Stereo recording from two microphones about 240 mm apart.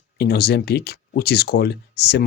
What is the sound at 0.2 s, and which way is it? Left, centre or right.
Speech, left.